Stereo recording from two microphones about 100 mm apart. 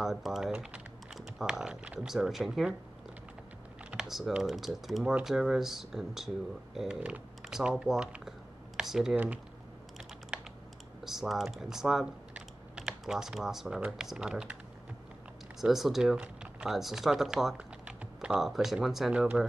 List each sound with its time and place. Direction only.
0.0 s speech: 5° right (ahead or behind)
3.9 s speech: centre (ahead or behind)
9.1 s speech: 15° right (ahead or behind)
11.1 s speech: 5° right (ahead or behind)
15.6 s speech: centre (ahead or behind)